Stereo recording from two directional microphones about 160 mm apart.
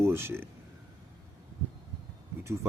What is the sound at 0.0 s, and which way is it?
Speech, 15° right (ahead or behind).